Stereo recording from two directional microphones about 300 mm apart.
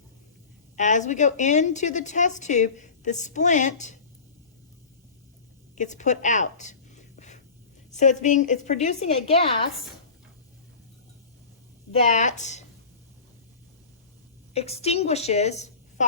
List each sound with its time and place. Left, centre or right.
0.8 s a woman's voice: left
5.7 s a woman's voice: left
7.2 s a sound: left
7.9 s a woman's voice: left
11.9 s a woman's voice: left
14.5 s a woman's voice: left